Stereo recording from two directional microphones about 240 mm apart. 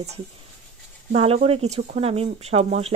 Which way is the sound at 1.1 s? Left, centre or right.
Right.